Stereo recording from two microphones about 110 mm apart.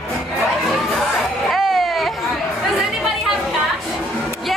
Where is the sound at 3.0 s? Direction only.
5° right (ahead or behind).